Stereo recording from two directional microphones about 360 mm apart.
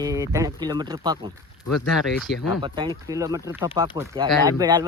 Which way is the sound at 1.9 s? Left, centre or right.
Centre.